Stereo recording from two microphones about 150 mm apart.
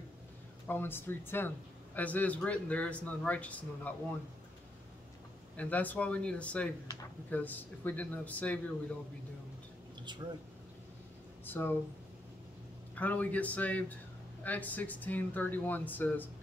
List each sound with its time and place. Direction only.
0.7 s speech: 15° left (ahead or behind)
5.6 s speech: 10° left (ahead or behind)
10.2 s speech: 20° right (ahead or behind)
11.4 s speech: 15° left (ahead or behind)
12.9 s speech: 10° left (ahead or behind)